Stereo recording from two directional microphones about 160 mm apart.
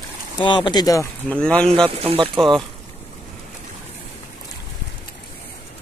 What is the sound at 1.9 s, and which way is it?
Speech, 35° right (ahead or behind).